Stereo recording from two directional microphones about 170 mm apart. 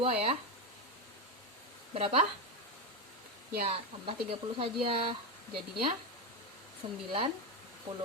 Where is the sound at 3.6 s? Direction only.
30° right (ahead or behind).